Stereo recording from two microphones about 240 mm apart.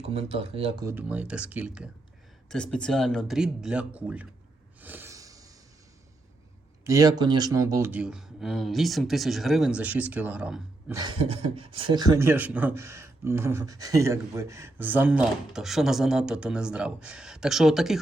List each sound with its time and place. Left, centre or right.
0.0 s speech: right
0.9 s speech: centre
4.8 s snort: centre
6.8 s speech: centre
11.0 s speech: right; by 17.9 s centre